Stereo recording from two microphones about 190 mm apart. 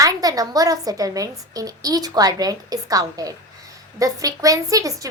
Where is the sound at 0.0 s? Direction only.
20° right (ahead or behind).